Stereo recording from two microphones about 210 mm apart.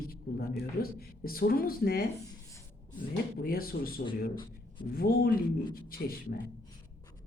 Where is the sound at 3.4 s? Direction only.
45° left (ahead or behind).